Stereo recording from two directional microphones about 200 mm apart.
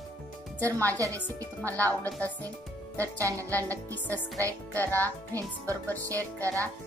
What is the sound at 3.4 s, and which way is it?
Speech, 10° left (ahead or behind).